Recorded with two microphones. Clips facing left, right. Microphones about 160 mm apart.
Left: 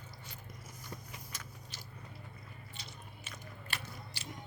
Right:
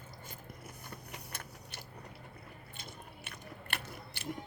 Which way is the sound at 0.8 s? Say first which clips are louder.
Left 1 dB; 60° right (ahead or behind).